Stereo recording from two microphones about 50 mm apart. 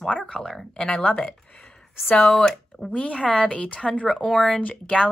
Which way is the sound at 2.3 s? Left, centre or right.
Centre.